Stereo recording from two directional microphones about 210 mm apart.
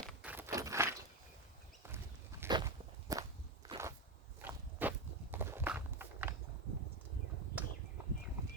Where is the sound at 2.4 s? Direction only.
15° right (ahead or behind).